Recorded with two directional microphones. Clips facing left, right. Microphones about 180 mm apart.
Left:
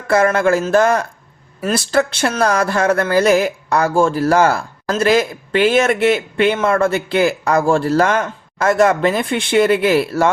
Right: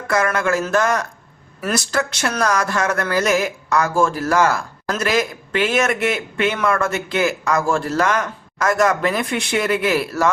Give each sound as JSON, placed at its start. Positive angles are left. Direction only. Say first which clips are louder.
{"t": 0.1, "sound": "speech", "louder": "left 5 dB", "side_deg": 30}